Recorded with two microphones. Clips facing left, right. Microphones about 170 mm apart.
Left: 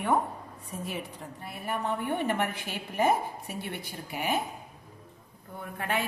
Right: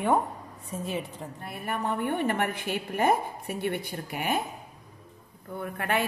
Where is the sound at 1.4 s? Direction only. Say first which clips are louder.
Right 1 dB; 55° right (ahead or behind).